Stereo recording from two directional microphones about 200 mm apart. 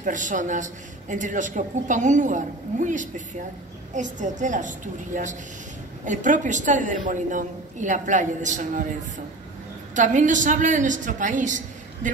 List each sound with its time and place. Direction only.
0.0 s a man's voice: 40° right (ahead or behind)
9.9 s a man's voice: 40° right (ahead or behind)